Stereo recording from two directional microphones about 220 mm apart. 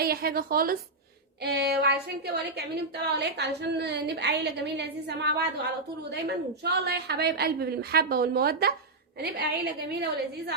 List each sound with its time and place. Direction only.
0.0 s a woman's voice: 45° right (ahead or behind)